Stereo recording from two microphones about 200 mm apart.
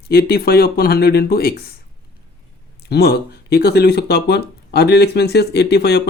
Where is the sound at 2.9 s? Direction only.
50° left (ahead or behind).